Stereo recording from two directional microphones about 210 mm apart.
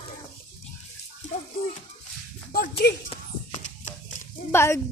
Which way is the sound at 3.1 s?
35° left (ahead or behind).